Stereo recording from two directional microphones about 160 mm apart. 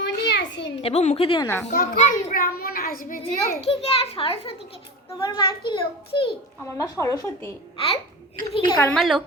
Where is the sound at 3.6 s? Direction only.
40° left (ahead or behind).